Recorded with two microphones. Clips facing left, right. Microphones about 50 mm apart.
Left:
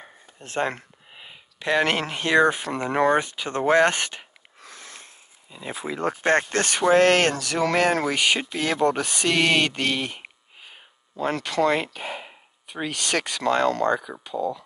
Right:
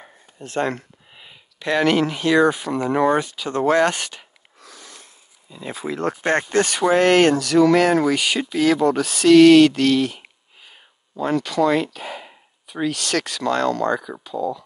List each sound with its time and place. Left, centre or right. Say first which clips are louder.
0.6 s speech: right 3 dB; left
1.1 s speech: left 1 dB; centre
2.7 s speech: right 3 dB; centre
3.2 s speech: right 3 dB; left
4.6 s a sound: even; left
5.5 s speech: right 3 dB; centre
6.2 s speech: right 2 dB; centre
7.3 s speech: right 10 dB; centre
7.6 s speech: right 4 dB; centre
8.1 s speech: right 2 dB; centre
8.5 s speech: right 5 dB; centre
11.2 s speech: right 3 dB; centre